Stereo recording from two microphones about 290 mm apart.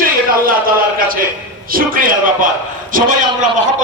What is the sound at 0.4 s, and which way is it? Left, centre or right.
A man's voice, right.